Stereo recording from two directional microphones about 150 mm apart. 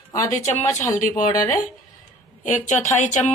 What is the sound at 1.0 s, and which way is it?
Speech, 60° left (ahead or behind).